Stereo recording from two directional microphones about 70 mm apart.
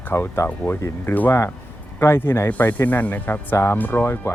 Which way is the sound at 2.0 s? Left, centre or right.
Left.